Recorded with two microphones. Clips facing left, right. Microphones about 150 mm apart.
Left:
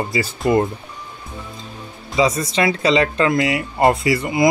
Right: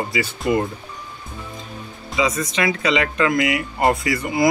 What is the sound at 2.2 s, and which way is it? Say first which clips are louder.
Speech: left 4 dB; 35° left (ahead or behind).